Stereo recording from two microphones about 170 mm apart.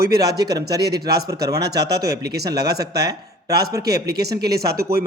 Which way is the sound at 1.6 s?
75° right (ahead or behind).